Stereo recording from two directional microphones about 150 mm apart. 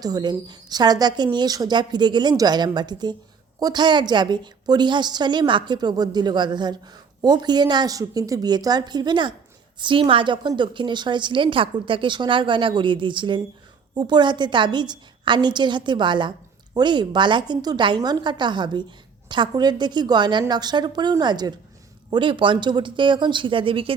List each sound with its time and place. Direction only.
0.0 s a woman's voice: 25° right (ahead or behind)